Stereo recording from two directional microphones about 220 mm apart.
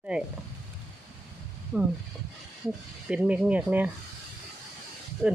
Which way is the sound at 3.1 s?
5° right (ahead or behind).